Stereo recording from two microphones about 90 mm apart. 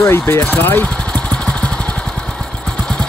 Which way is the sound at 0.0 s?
30° left (ahead or behind).